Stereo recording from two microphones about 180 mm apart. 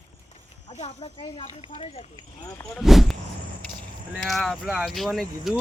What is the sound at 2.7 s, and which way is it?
Speech, centre (ahead or behind).